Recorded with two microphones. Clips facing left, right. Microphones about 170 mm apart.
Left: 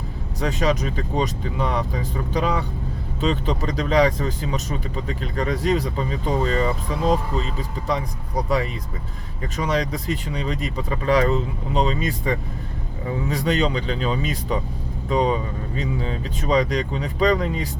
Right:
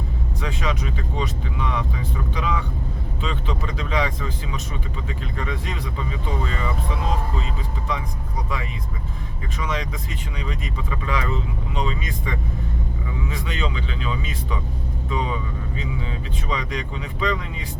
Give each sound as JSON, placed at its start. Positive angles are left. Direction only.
{"t": 0.3, "sound": "speech", "side_deg": 40}
{"t": 7.9, "sound": "speech", "side_deg": 35}
{"t": 9.6, "sound": "speech", "side_deg": 35}